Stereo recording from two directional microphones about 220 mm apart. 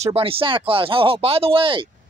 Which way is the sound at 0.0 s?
25° right (ahead or behind).